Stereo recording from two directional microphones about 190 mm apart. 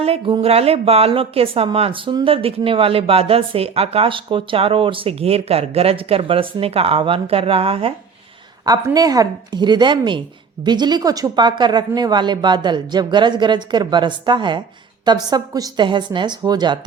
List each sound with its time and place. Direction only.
0.0 s speech: 30° right (ahead or behind)
8.6 s speech: 20° right (ahead or behind)